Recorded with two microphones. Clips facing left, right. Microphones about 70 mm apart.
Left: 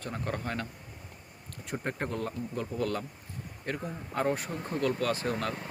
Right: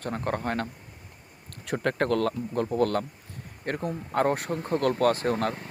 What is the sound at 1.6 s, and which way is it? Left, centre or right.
Speech, right.